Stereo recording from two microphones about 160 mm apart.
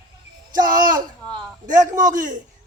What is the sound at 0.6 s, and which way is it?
A man's voice, 60° right (ahead or behind).